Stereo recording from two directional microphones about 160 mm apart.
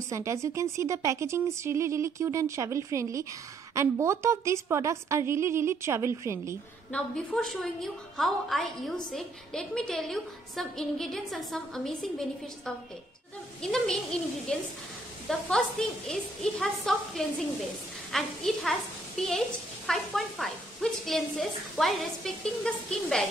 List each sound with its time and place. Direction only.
0.1 s speech: 20° right (ahead or behind)
6.9 s a woman's voice: 5° left (ahead or behind)